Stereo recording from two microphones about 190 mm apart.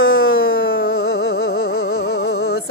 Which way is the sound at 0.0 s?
90° left.